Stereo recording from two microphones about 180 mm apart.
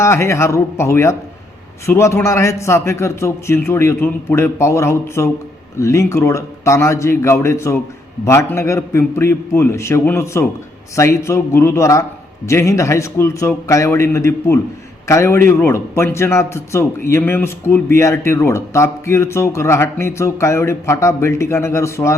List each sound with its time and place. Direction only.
0.0 s speech: 15° left (ahead or behind)